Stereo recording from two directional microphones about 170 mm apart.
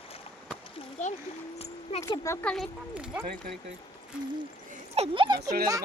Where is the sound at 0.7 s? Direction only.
45° left (ahead or behind).